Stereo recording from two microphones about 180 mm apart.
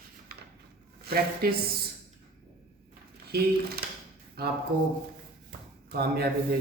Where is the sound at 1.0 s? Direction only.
55° right (ahead or behind).